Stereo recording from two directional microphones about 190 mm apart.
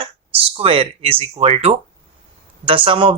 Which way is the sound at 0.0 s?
30° right (ahead or behind).